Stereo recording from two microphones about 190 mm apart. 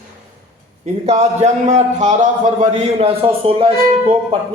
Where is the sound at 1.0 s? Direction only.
35° right (ahead or behind).